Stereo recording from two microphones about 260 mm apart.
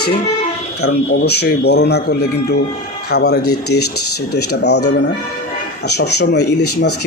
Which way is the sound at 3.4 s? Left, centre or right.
Left.